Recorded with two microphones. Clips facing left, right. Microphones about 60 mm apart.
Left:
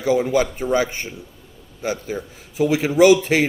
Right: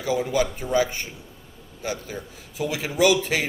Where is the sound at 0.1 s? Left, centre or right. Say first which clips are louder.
Left 5 dB; left.